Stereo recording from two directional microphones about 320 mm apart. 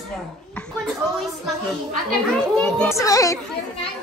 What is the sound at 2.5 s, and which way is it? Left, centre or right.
Speech, centre.